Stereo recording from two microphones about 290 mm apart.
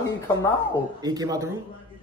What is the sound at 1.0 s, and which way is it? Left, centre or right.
Speech, centre.